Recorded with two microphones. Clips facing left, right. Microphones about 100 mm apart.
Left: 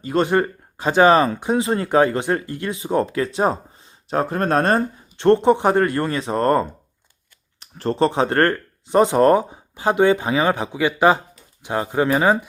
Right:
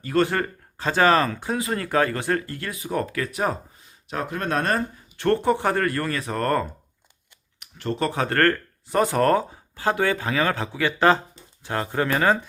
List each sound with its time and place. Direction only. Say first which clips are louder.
0.0 s speech: left 4 dB; 20° left (ahead or behind)
7.6 s speech: left 7 dB; 35° left (ahead or behind); by 12.5 s 15° left (ahead or behind)